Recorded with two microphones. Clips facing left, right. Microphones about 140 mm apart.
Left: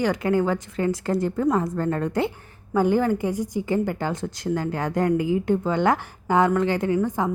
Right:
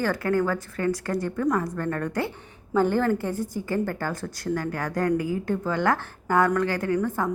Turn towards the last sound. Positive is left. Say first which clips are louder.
# left 2 dB
turn(degrees=20)  # may be behind; listen again after turning